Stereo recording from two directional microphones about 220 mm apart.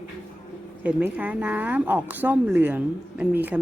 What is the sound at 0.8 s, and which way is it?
A woman's voice, 5° right (ahead or behind).